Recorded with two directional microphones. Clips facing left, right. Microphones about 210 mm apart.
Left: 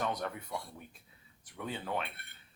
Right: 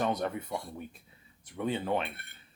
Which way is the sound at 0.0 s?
25° right (ahead or behind).